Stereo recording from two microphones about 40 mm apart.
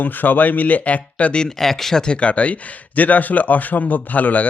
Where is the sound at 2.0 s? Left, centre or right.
Left.